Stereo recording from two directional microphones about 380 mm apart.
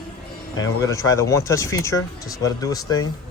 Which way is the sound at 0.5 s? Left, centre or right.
Centre.